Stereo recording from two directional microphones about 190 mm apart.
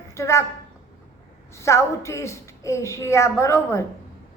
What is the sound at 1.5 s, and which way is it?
A woman's voice, 15° left (ahead or behind).